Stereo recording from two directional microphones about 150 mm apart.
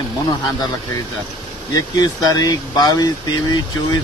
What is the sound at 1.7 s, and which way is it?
Speech, 25° left (ahead or behind).